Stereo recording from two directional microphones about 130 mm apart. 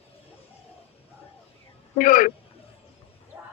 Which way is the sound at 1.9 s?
90° left.